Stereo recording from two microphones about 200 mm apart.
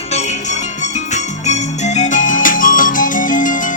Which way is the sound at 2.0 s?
40° left (ahead or behind).